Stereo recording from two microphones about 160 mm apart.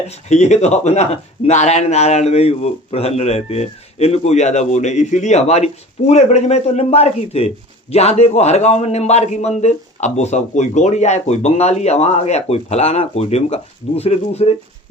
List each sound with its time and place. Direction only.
0.1 s a man's voice: 45° left (ahead or behind)